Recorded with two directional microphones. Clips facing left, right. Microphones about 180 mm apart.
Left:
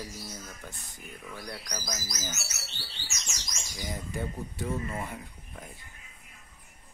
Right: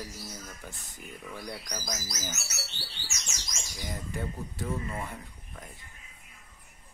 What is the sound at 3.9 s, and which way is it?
Speech, centre (ahead or behind).